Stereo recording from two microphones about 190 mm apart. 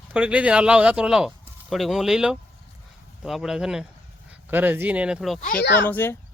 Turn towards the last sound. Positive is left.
turn(degrees=10)  # may be behind; listen again after turning